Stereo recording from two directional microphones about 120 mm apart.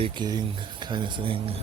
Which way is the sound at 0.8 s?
40° right (ahead or behind).